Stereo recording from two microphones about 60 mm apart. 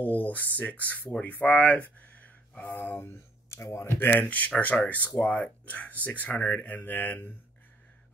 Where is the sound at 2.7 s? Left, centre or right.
Left.